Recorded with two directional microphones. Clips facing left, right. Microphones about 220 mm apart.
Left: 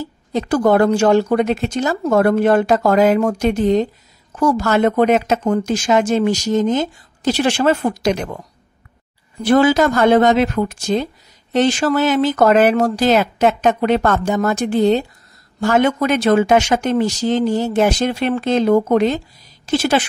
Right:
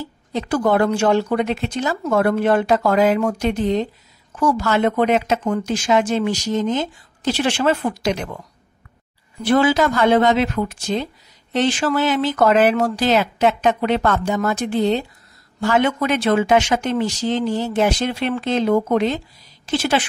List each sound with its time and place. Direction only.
0.0 s speech: 45° left (ahead or behind)
9.4 s speech: 45° left (ahead or behind)